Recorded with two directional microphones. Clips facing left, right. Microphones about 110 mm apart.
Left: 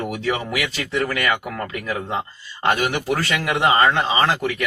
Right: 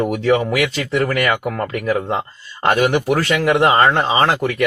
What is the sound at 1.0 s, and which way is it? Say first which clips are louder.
Speech: right 4 dB; 40° right (ahead or behind).